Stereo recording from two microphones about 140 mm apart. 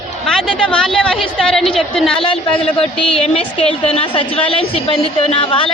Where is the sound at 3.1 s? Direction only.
45° left (ahead or behind).